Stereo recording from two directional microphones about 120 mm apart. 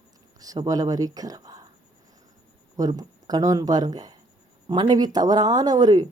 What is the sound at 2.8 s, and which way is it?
Speech, 30° right (ahead or behind).